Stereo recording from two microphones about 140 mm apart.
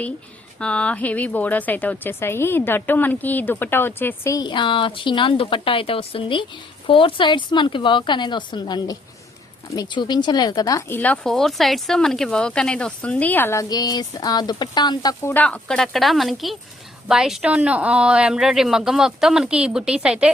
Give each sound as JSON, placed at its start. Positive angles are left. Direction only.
{"t": 0.6, "sound": "speech", "side_deg": 10}
{"t": 15.2, "sound": "speech", "side_deg": 15}